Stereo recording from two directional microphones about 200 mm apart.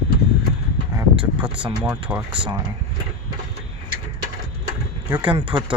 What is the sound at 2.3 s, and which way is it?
Speech, 25° right (ahead or behind).